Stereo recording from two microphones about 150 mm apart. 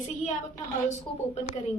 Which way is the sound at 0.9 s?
50° left (ahead or behind).